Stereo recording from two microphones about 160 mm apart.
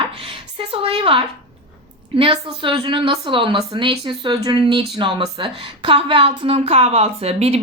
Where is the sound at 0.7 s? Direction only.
35° right (ahead or behind).